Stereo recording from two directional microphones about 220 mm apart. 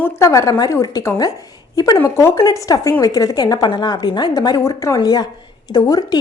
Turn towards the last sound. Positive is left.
turn(degrees=15)  # may be behind; listen again after turning